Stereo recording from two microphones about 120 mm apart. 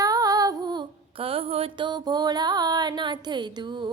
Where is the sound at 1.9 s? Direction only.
35° right (ahead or behind).